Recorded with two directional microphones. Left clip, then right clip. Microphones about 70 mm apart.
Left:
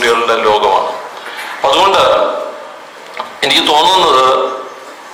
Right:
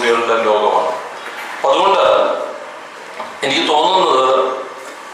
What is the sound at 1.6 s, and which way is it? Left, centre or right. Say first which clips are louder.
Speech: left 3 dB; left.